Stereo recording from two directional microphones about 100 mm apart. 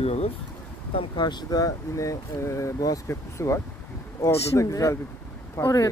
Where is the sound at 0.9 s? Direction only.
50° left (ahead or behind).